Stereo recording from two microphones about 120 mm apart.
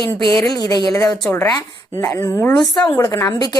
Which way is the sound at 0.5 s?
35° left (ahead or behind).